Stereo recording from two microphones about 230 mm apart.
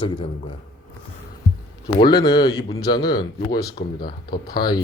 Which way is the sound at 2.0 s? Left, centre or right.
Centre.